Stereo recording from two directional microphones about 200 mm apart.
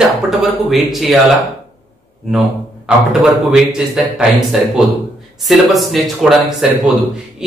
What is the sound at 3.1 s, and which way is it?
A man's voice, 5° right (ahead or behind).